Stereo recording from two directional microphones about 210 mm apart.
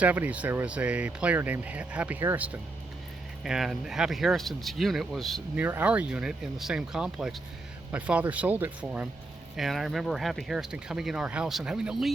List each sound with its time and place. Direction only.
0.0 s speech: 5° right (ahead or behind)